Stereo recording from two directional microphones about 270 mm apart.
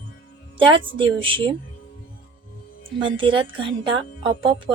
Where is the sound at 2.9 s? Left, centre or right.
Centre.